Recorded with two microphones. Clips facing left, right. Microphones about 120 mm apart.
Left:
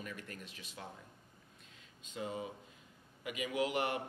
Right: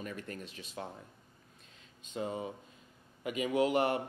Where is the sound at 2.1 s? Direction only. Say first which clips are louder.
Right 4 dB; 30° right (ahead or behind).